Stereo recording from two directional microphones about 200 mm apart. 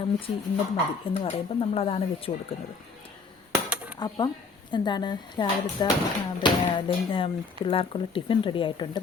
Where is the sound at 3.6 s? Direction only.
5° right (ahead or behind).